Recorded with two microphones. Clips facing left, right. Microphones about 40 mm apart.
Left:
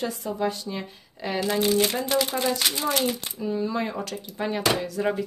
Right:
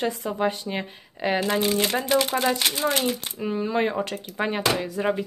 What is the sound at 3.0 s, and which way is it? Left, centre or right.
Speech, right.